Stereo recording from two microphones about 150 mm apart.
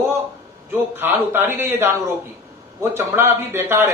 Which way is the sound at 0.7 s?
15° right (ahead or behind).